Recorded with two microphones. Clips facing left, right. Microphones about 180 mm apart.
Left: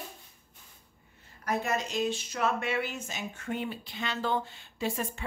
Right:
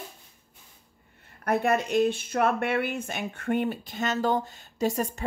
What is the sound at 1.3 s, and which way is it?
Speech, 60° right (ahead or behind).